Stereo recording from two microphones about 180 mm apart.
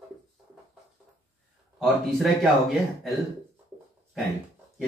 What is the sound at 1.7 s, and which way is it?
Speech, centre (ahead or behind).